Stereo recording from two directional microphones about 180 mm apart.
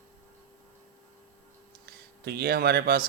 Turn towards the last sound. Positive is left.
turn(degrees=-55)  # may be behind; listen again after turning